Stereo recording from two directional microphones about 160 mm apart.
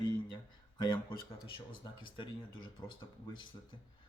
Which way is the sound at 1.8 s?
30° left (ahead or behind).